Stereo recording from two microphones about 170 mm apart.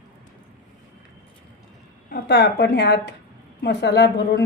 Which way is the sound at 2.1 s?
75° left (ahead or behind).